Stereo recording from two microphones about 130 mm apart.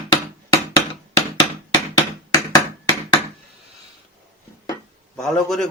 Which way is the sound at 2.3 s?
30° left (ahead or behind).